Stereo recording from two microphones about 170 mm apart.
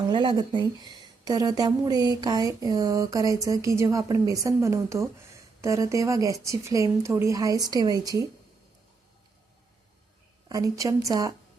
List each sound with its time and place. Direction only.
0.1 s a woman's voice: 30° right (ahead or behind)
10.5 s a woman's voice: 20° right (ahead or behind)